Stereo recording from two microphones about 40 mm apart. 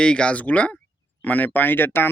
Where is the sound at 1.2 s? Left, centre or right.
Left.